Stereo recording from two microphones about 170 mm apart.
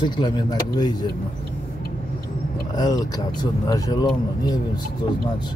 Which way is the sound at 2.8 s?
20° left (ahead or behind).